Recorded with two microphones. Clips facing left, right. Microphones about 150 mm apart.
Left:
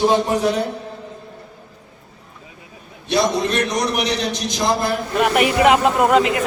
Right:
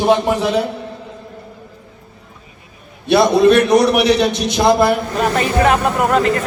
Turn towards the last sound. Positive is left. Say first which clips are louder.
# even
turn(degrees=15)  # may be behind; listen again after turning